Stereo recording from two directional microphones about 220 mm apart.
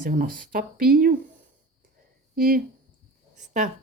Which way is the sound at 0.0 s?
40° right (ahead or behind).